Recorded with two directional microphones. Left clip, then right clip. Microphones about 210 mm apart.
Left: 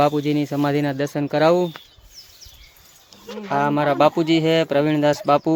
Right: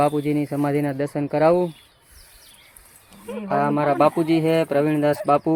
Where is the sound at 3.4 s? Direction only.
5° left (ahead or behind).